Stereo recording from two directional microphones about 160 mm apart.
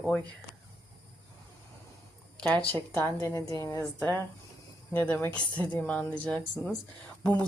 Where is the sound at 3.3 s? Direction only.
20° left (ahead or behind).